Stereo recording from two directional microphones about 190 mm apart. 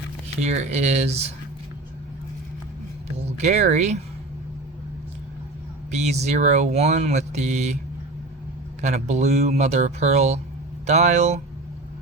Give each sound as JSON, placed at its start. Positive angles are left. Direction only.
{"t": 0.3, "sound": "speech", "side_deg": -35}
{"t": 3.3, "sound": "speech", "side_deg": -35}
{"t": 5.9, "sound": "speech", "side_deg": -35}
{"t": 8.8, "sound": "speech", "side_deg": -35}